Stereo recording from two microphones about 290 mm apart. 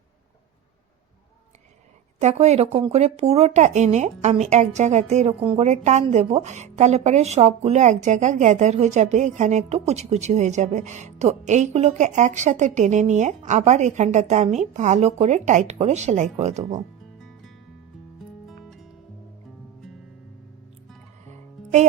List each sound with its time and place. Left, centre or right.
2.2 s speech: right
18.4 s music: centre
21.2 s music: right